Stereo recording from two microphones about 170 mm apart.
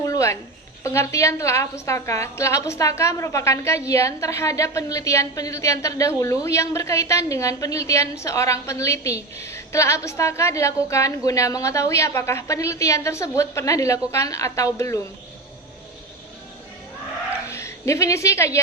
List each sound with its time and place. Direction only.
0.0 s a sound: 20° left (ahead or behind)
0.9 s a woman's voice: 15° left (ahead or behind)
17.5 s a woman's voice: 15° left (ahead or behind)